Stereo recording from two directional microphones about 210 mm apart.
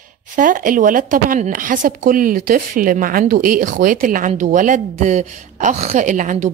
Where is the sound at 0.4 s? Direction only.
40° right (ahead or behind).